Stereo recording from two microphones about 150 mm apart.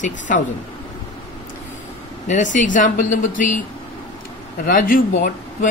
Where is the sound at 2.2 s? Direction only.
55° left (ahead or behind).